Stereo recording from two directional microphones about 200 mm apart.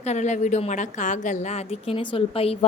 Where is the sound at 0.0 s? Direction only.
35° left (ahead or behind).